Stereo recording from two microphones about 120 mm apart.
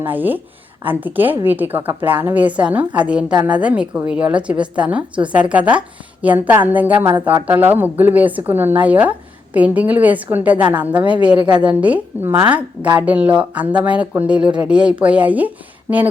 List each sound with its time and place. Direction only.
0.0 s speech: 15° right (ahead or behind)
11.3 s a woman's voice: 40° right (ahead or behind)
11.8 s speech: 10° right (ahead or behind)